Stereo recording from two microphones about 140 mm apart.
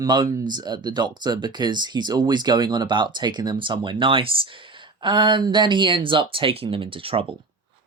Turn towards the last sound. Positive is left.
turn(degrees=-40)  # may be behind; listen again after turning